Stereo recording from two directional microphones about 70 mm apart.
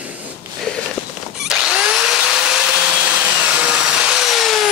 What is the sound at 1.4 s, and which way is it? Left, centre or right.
Vacuum cleaner, centre.